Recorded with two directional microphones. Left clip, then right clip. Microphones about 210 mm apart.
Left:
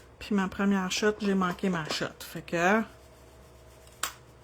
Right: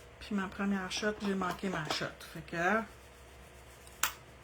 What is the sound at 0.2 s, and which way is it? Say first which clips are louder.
Speech: left 7 dB; 40° left (ahead or behind).